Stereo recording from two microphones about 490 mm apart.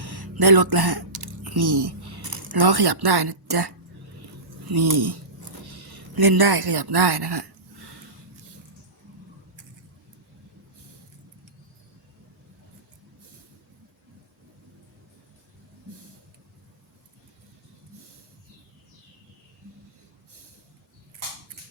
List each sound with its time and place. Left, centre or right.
0.0 s typing: right
4.7 s speech: right
6.1 s speech: right